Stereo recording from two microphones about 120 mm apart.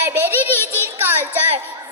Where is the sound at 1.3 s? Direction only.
15° right (ahead or behind).